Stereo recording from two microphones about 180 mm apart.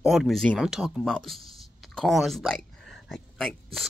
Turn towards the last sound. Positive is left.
turn(degrees=0)  # may be behind; listen again after turning